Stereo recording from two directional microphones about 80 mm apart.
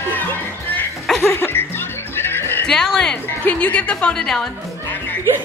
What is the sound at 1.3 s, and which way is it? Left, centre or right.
Music, left.